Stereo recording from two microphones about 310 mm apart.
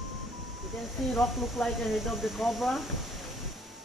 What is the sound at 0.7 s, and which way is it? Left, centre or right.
Speech, centre.